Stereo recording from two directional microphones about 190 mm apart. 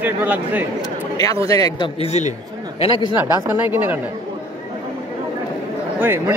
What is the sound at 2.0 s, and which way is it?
A man's voice, 35° left (ahead or behind).